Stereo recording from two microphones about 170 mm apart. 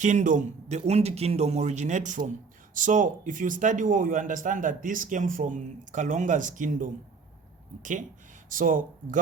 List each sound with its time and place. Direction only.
0.0 s speech: 45° right (ahead or behind)